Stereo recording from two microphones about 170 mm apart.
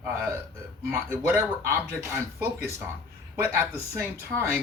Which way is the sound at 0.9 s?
15° right (ahead or behind).